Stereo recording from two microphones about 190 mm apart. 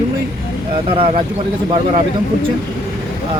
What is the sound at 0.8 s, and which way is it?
Speech, 30° right (ahead or behind).